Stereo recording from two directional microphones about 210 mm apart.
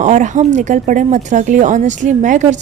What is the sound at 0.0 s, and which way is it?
A woman's voice, 35° right (ahead or behind).